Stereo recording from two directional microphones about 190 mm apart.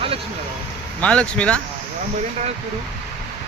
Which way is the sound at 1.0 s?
5° left (ahead or behind).